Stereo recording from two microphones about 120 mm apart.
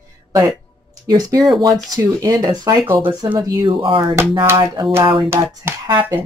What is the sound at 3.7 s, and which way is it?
Speech, 45° right (ahead or behind).